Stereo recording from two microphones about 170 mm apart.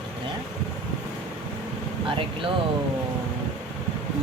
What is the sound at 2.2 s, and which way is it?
Speech, 30° right (ahead or behind).